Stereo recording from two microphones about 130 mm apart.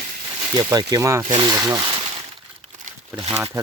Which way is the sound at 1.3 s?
35° right (ahead or behind).